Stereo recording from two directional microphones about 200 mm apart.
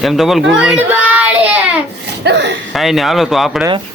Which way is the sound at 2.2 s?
60° right (ahead or behind).